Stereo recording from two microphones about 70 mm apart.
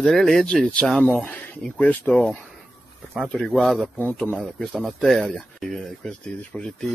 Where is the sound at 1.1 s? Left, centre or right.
Left.